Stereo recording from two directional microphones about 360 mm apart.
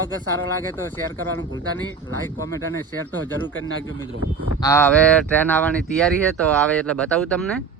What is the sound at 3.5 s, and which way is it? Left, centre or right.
Speech, left.